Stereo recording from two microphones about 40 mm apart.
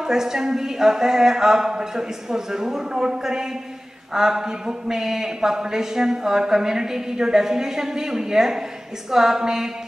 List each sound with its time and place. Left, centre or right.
0.0 s a man's voice: centre